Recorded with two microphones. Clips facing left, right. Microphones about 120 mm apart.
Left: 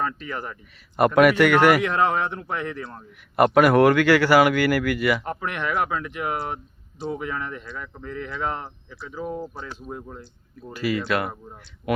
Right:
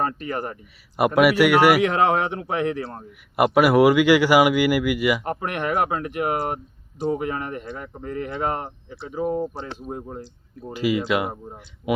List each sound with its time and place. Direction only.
0.0 s speech: 50° right (ahead or behind)
0.9 s speech: 10° right (ahead or behind)
1.8 s speech: 60° right (ahead or behind)
2.8 s speech: 40° right (ahead or behind)
3.3 s speech: 10° right (ahead or behind)
5.2 s speech: 50° right (ahead or behind)
9.9 s speech: 35° right (ahead or behind)
10.6 s speech: 15° right (ahead or behind)